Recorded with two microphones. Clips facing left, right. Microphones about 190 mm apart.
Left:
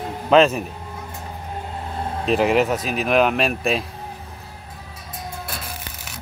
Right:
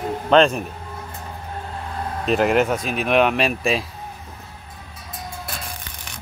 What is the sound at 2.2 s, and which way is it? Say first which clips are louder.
Speech: even; centre (ahead or behind).